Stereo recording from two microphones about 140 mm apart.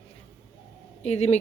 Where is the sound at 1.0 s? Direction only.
50° left (ahead or behind).